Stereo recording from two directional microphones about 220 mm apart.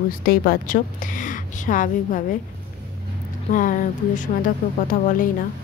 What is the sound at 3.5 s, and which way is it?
A woman's voice, 35° left (ahead or behind).